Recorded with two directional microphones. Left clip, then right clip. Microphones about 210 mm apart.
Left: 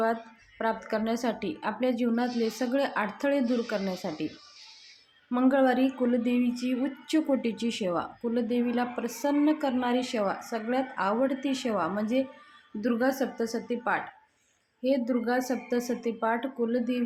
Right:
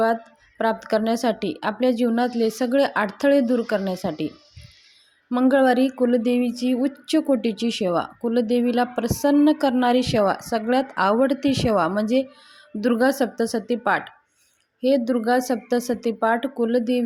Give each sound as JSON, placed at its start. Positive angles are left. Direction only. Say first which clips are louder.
{"t": 0.6, "sound": "a woman's voice", "louder": "right 8 dB", "side_deg": -30}
{"t": 5.3, "sound": "a woman's voice", "louder": "right 6 dB", "side_deg": -30}